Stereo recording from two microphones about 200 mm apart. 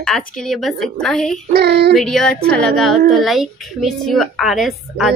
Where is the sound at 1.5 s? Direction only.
55° right (ahead or behind).